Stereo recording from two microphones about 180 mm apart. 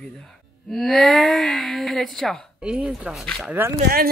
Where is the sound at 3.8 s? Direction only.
55° right (ahead or behind).